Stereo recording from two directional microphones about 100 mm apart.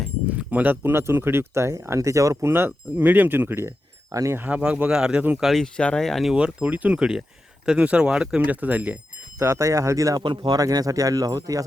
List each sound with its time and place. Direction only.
0.3 s speech: 15° right (ahead or behind); by 2.5 s 30° right (ahead or behind)
2.5 s speech: 20° right (ahead or behind)
4.4 s speech: 15° right (ahead or behind)
5.5 s speech: 5° left (ahead or behind)
6.3 s speech: 10° right (ahead or behind)
9.4 s speech: 30° right (ahead or behind)
10.2 s speech: 50° right (ahead or behind)
10.6 s speech: 35° right (ahead or behind)